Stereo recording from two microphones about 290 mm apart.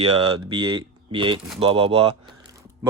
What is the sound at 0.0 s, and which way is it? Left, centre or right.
Speech, centre.